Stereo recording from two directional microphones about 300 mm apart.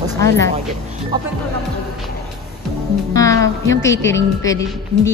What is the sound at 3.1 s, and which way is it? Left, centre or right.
A woman's voice, centre.